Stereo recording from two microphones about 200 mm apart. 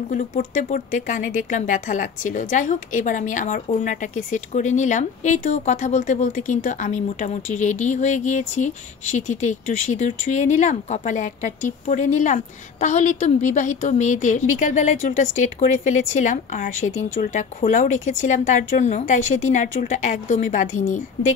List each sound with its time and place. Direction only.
0.1 s speech: 40° left (ahead or behind)